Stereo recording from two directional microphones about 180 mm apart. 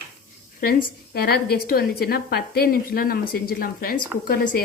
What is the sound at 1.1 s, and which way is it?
A woman's voice, 60° left (ahead or behind).